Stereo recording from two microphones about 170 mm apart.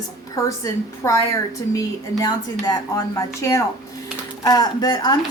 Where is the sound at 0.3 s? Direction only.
20° left (ahead or behind).